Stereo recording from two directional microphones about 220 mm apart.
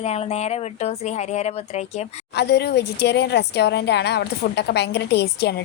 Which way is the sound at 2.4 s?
50° left (ahead or behind).